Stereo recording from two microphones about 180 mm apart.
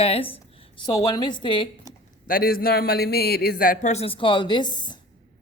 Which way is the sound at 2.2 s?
55° left (ahead or behind).